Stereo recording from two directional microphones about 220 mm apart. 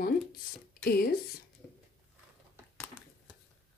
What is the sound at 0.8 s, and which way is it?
Speech, 45° left (ahead or behind).